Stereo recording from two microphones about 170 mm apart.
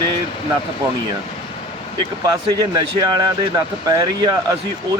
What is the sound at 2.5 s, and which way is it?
Speech, 20° right (ahead or behind).